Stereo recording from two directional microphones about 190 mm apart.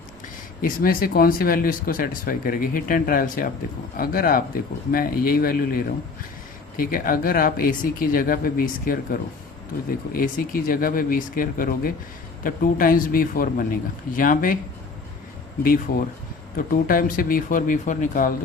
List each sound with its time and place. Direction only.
0.6 s speech: 50° left (ahead or behind)
10.2 s speech: 50° left (ahead or behind)
15.9 s speech: 50° left (ahead or behind)